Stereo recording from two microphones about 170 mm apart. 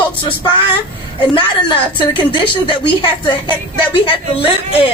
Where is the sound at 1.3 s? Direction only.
30° left (ahead or behind).